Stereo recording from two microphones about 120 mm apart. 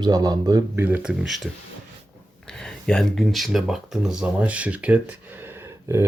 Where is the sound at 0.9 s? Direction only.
10° right (ahead or behind).